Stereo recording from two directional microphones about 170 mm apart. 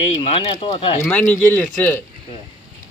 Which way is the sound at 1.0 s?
10° left (ahead or behind).